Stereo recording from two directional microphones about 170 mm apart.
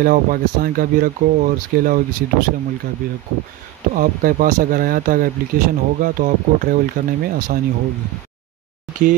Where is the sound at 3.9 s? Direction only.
55° right (ahead or behind).